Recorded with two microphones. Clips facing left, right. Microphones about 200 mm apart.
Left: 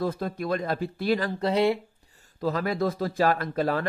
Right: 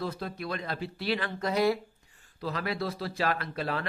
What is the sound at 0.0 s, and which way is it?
Speech, 45° left (ahead or behind).